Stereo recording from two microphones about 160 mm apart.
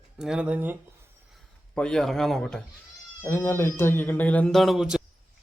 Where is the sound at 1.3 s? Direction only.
5° left (ahead or behind).